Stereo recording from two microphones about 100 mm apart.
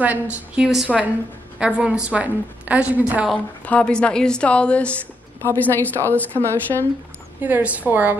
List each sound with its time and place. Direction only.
0.0 s a woman's voice: 15° right (ahead or behind)
3.6 s a woman's voice: 10° left (ahead or behind)
7.4 s a woman's voice: 15° right (ahead or behind)